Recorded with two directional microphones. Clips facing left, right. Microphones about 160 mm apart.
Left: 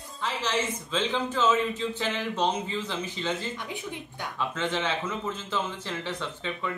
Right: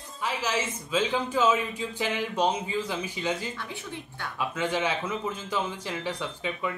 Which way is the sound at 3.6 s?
15° left (ahead or behind).